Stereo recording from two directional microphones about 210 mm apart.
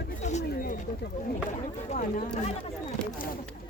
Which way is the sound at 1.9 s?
40° left (ahead or behind).